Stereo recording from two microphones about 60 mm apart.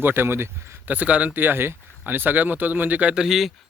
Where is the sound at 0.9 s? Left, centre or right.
Right.